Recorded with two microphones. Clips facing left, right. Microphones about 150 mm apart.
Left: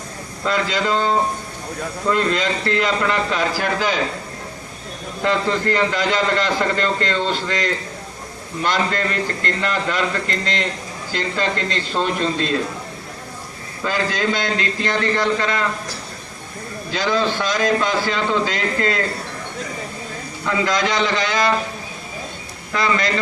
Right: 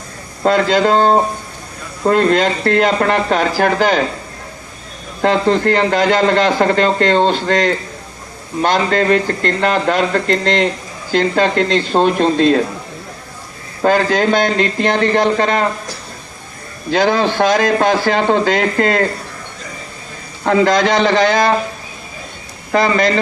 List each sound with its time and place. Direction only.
0.4 s a man's voice: 60° right (ahead or behind)
5.2 s a man's voice: 60° right (ahead or behind)
13.8 s a man's voice: 55° right (ahead or behind)
16.9 s a man's voice: 60° right (ahead or behind)
20.4 s a man's voice: 60° right (ahead or behind)
22.7 s a man's voice: 65° right (ahead or behind)